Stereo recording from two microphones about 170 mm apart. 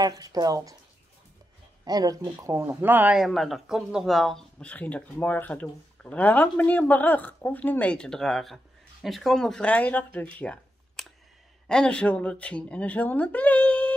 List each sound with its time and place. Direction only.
0.0 s speech: 20° right (ahead or behind)
1.9 s speech: 20° right (ahead or behind); by 10.2 s 10° left (ahead or behind)
10.4 s a sound: 5° left (ahead or behind)
11.6 s speech: 5° left (ahead or behind)